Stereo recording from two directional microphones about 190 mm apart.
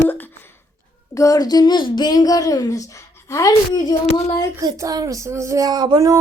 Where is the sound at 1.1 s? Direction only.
15° left (ahead or behind).